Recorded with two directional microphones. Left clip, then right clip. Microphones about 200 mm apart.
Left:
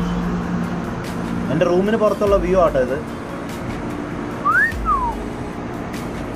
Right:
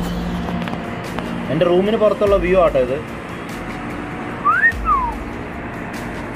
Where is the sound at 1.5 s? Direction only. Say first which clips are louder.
Right 2 dB; 25° right (ahead or behind).